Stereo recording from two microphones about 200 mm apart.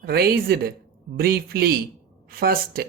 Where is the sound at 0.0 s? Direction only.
50° right (ahead or behind).